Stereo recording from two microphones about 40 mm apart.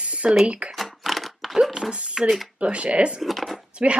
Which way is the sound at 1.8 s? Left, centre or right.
Centre.